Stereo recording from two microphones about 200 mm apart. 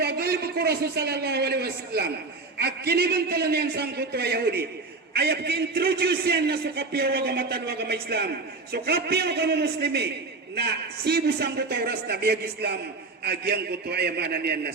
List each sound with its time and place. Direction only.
0.0 s a man's voice: 50° right (ahead or behind)